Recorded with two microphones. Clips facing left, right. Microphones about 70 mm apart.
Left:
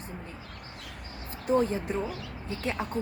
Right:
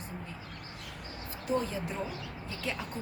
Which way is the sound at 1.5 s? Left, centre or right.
Left.